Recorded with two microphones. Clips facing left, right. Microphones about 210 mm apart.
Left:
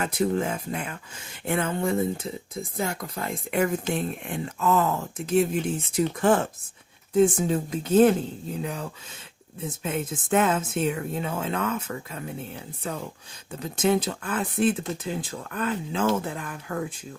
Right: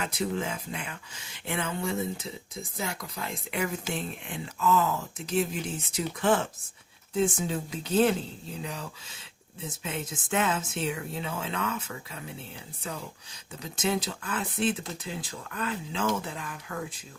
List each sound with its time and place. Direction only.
0.0 s speech: 50° left (ahead or behind)